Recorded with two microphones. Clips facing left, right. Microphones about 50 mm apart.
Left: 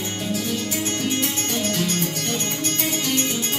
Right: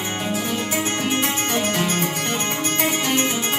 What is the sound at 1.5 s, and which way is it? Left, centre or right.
Music, right.